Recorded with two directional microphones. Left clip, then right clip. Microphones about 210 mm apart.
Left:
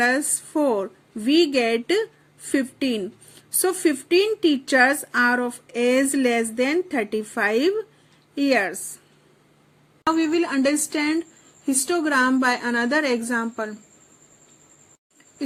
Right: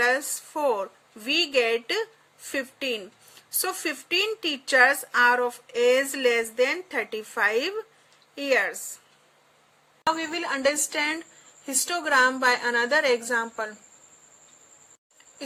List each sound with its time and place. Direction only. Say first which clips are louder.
0.0 s speech: left 2 dB; 15° left (ahead or behind)
10.1 s a woman's voice: left 5 dB; centre (ahead or behind)